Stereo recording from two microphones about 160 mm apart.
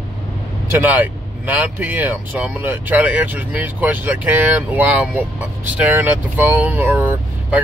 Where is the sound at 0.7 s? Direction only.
10° right (ahead or behind).